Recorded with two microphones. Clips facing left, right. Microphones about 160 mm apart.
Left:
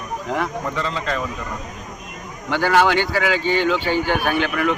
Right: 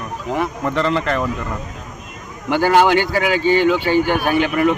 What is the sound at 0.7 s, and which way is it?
Speech, 60° right (ahead or behind).